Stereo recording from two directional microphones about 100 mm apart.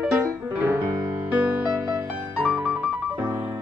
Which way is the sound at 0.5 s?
20° right (ahead or behind).